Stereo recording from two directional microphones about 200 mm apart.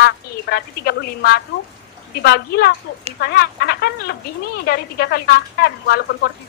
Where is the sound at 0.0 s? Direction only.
55° left (ahead or behind).